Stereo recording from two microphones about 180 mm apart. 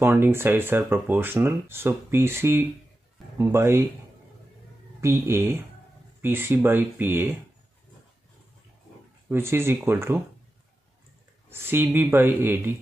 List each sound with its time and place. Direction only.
0.0 s speech: 15° right (ahead or behind)
5.0 s speech: 15° right (ahead or behind)
9.3 s speech: 15° right (ahead or behind)
11.5 s speech: 10° right (ahead or behind)